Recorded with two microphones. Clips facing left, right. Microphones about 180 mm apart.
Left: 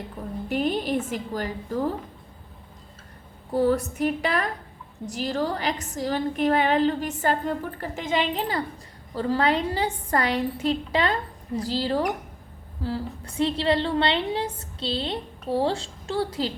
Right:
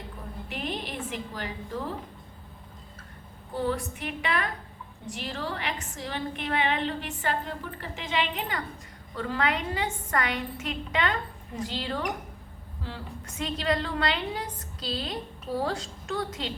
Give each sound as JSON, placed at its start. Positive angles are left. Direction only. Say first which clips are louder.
{"t": 0.4, "sound": "a woman's voice", "louder": "left 10 dB", "side_deg": 45}
{"t": 3.6, "sound": "a woman's voice", "louder": "left 8 dB", "side_deg": 40}